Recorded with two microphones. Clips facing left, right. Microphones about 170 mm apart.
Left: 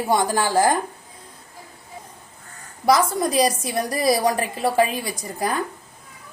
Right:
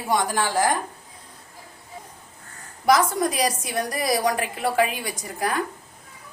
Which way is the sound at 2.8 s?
30° left (ahead or behind).